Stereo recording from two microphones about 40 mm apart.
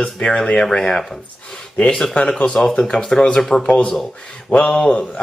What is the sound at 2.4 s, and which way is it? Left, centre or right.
Speech, centre.